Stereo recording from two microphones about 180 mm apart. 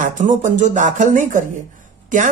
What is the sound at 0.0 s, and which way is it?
Speech, 45° right (ahead or behind).